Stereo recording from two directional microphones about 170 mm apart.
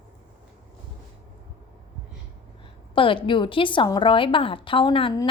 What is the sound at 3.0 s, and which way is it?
A woman's voice, 30° left (ahead or behind).